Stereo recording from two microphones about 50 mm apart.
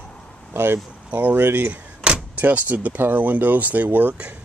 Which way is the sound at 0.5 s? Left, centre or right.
Right.